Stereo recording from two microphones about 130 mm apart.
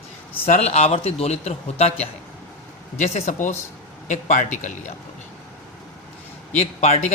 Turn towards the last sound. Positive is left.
turn(degrees=60)  # may be behind; listen again after turning